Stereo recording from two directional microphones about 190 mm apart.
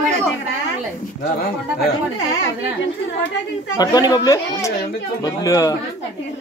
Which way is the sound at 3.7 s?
20° left (ahead or behind).